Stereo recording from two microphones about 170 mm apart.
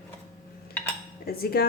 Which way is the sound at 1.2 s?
65° left (ahead or behind).